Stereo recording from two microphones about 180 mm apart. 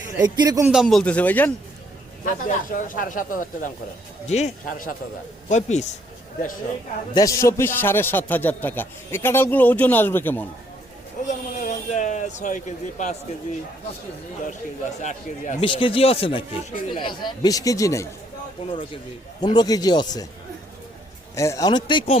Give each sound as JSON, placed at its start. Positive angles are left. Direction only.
{"t": 0.2, "sound": "speech", "side_deg": -20}
{"t": 0.7, "sound": "a man's voice", "side_deg": 0}
{"t": 2.2, "sound": "speech", "side_deg": 45}
{"t": 7.1, "sound": "a man's voice", "side_deg": 20}
{"t": 11.3, "sound": "speech", "side_deg": 45}
{"t": 15.0, "sound": "speech", "side_deg": 40}
{"t": 15.6, "sound": "speech", "side_deg": 30}
{"t": 19.4, "sound": "speech", "side_deg": 25}
{"t": 21.3, "sound": "speech", "side_deg": 15}